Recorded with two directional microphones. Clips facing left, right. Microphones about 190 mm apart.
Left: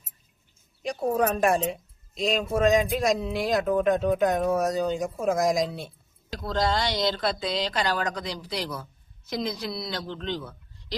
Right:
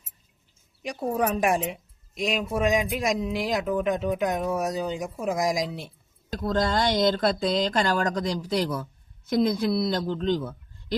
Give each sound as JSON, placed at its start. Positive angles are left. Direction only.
{"t": 0.9, "sound": "speech", "side_deg": -15}
{"t": 6.4, "sound": "speech", "side_deg": -50}